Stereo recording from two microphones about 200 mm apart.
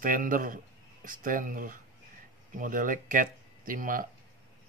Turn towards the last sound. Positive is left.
turn(degrees=-45)  # may be behind; listen again after turning